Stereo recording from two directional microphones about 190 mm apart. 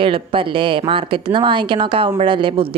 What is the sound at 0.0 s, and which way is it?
A woman's voice, 30° right (ahead or behind).